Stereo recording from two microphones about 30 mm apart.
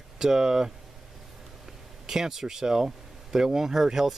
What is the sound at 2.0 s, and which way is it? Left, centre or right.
Speech, centre.